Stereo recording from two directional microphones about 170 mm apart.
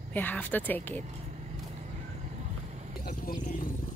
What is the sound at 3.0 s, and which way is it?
Speech, 55° left (ahead or behind).